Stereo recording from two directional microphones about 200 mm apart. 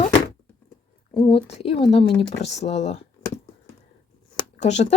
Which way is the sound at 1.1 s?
25° left (ahead or behind).